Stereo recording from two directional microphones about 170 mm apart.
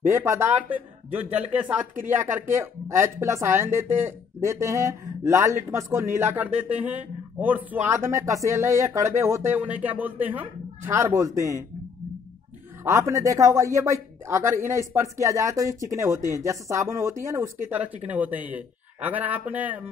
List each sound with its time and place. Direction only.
0.1 s speech: 15° right (ahead or behind)
12.8 s speech: 15° right (ahead or behind)